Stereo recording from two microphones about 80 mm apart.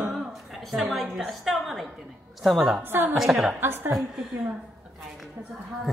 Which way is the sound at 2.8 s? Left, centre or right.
Right.